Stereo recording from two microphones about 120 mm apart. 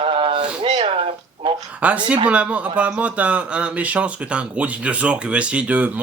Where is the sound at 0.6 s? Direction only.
60° right (ahead or behind).